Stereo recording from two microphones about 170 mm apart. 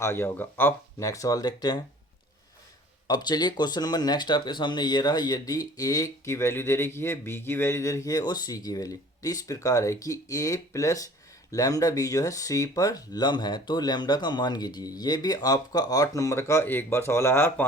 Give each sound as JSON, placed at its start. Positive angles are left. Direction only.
{"t": 0.0, "sound": "speech", "side_deg": 15}
{"t": 3.1, "sound": "speech", "side_deg": 25}